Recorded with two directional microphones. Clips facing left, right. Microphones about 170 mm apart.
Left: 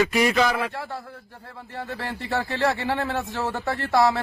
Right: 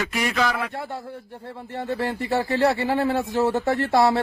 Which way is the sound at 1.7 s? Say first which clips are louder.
Right 6 dB; 20° right (ahead or behind).